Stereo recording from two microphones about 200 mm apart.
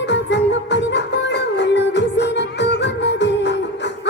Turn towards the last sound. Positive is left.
turn(degrees=60)  # may be behind; listen again after turning